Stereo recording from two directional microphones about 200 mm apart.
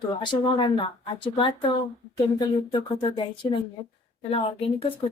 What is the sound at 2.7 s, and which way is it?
Speech, 25° left (ahead or behind).